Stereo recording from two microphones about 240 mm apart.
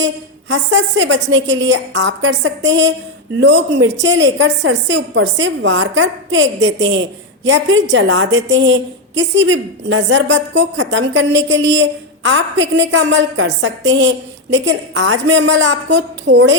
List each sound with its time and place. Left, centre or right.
0.0 s a woman's voice: right